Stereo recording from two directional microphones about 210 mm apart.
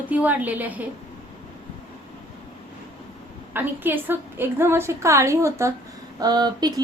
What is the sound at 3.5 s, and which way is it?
A woman's voice, 10° right (ahead or behind).